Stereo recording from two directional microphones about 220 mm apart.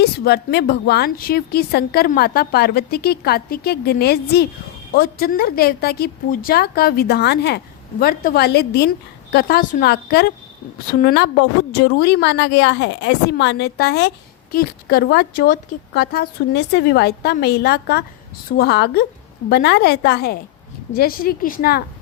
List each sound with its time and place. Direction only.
0.0 s a woman's voice: 50° left (ahead or behind)